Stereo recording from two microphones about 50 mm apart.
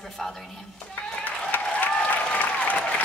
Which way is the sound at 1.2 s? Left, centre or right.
Left.